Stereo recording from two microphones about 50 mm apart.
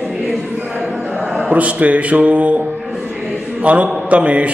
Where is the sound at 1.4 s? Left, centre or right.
Right.